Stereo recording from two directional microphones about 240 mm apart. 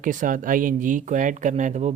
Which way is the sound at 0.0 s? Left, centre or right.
Right.